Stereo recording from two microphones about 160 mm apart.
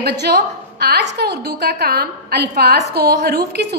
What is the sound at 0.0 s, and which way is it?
A woman's voice, 90° right.